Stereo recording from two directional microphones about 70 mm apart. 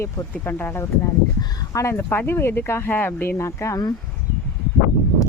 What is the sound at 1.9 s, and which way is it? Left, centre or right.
Speech, left.